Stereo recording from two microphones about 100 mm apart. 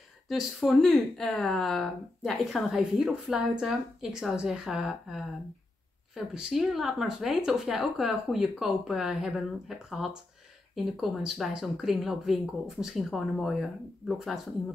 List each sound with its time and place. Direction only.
0.3 s speech: centre (ahead or behind)